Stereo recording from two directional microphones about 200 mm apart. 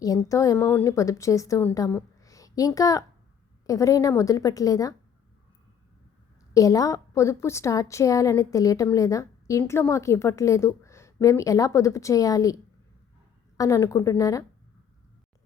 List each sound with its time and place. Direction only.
0.0 s a woman's voice: 15° left (ahead or behind)
6.5 s a woman's voice: 15° left (ahead or behind)
13.6 s a woman's voice: 15° left (ahead or behind)